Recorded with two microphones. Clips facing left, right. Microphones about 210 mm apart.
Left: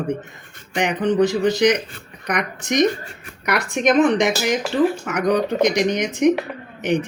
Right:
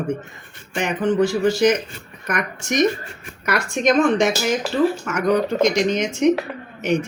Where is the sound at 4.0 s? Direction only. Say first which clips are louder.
Left 1 dB; 15° left (ahead or behind).